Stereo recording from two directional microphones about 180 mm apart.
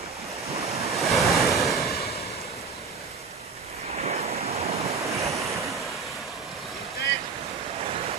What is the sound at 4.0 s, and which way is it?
Waves, 35° right (ahead or behind).